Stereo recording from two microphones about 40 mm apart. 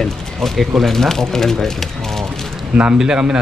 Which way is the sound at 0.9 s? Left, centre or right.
Centre.